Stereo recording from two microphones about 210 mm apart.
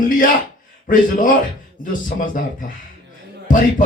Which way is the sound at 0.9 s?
40° left (ahead or behind).